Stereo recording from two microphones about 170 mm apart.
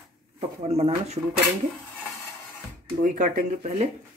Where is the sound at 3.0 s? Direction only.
55° right (ahead or behind).